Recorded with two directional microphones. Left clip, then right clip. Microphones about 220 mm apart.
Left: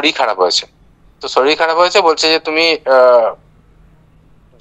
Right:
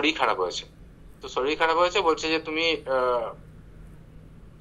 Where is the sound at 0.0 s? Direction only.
55° left (ahead or behind).